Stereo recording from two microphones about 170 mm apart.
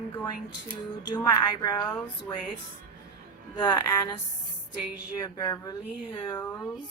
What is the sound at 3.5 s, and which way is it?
Speech, 25° left (ahead or behind).